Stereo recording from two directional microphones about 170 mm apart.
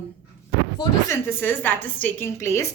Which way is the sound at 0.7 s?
15° left (ahead or behind).